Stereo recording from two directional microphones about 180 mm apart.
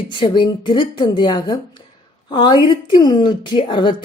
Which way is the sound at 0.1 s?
25° left (ahead or behind).